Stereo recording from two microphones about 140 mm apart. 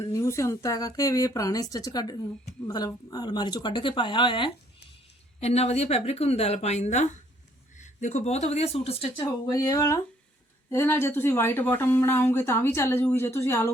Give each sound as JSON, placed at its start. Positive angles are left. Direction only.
{"t": 0.0, "sound": "speech", "side_deg": 20}
{"t": 5.4, "sound": "speech", "side_deg": 50}
{"t": 9.5, "sound": "speech", "side_deg": 25}